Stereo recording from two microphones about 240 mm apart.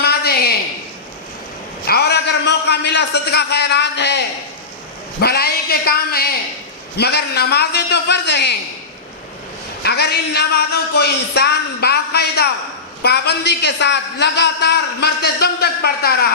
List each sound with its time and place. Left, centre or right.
0.0 s a sound: left
1.9 s a man's voice: left
9.8 s a man's voice: left